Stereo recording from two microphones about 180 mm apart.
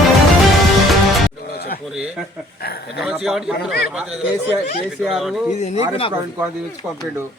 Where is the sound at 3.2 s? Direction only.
Centre (ahead or behind).